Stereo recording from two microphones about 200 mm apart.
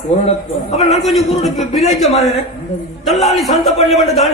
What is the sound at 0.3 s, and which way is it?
Speech, 35° left (ahead or behind).